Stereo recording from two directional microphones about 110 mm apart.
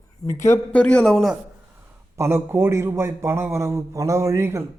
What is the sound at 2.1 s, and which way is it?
A man's voice, 25° right (ahead or behind).